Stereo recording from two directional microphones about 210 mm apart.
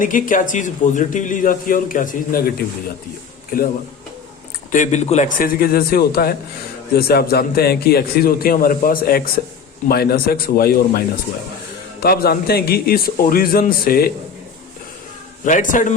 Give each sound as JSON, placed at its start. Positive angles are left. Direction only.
{"t": 0.0, "sound": "a man's voice", "side_deg": 40}
{"t": 4.7, "sound": "a man's voice", "side_deg": 35}
{"t": 12.0, "sound": "a man's voice", "side_deg": 45}
{"t": 15.4, "sound": "a man's voice", "side_deg": 40}